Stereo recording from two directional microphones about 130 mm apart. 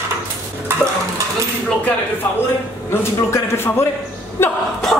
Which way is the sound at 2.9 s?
20° left (ahead or behind).